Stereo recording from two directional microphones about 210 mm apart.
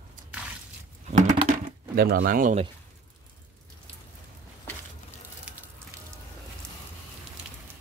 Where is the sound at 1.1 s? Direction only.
35° right (ahead or behind).